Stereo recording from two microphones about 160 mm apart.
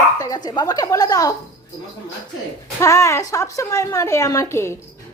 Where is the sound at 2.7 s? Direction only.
20° left (ahead or behind).